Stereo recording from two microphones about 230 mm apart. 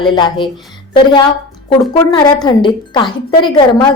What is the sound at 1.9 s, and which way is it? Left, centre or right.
Speech, centre.